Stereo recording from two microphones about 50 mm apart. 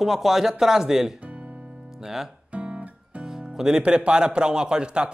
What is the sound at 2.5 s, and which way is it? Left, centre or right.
Speech, right.